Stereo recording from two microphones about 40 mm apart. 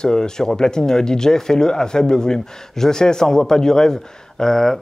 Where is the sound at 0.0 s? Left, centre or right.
Centre.